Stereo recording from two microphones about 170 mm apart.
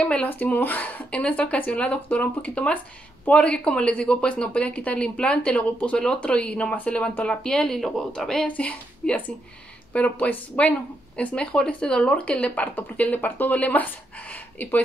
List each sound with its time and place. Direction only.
0.0 s speech: 10° left (ahead or behind)